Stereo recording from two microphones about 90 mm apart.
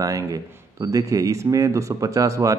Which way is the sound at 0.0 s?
40° right (ahead or behind).